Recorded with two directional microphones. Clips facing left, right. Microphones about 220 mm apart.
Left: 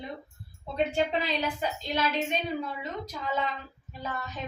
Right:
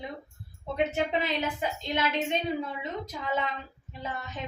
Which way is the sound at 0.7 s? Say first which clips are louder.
Left 1 dB; 20° right (ahead or behind).